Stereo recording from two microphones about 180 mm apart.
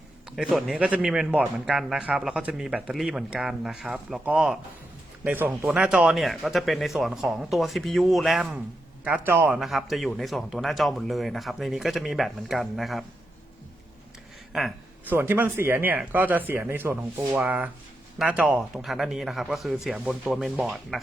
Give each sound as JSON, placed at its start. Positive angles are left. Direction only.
{"t": 0.3, "sound": "a man's voice", "side_deg": -5}
{"t": 15.1, "sound": "a man's voice", "side_deg": -10}